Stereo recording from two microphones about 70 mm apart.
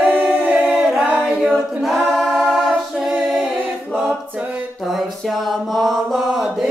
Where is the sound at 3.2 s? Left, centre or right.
Centre.